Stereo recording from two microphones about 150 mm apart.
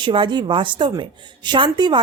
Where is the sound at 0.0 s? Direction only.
35° right (ahead or behind).